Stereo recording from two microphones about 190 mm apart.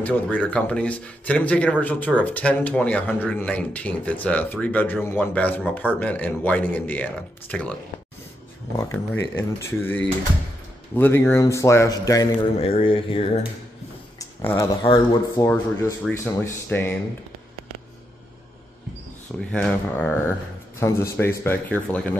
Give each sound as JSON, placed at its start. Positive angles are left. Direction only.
{"t": 0.0, "sound": "speech", "side_deg": 10}
{"t": 8.7, "sound": "speech", "side_deg": 15}
{"t": 12.5, "sound": "speech", "side_deg": 30}
{"t": 14.1, "sound": "speech", "side_deg": 15}
{"t": 16.0, "sound": "speech", "side_deg": 10}
{"t": 19.5, "sound": "speech", "side_deg": 5}